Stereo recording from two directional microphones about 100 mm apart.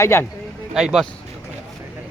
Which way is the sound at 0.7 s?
5° right (ahead or behind).